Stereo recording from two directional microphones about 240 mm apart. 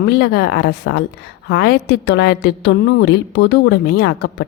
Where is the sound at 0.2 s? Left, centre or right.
Left.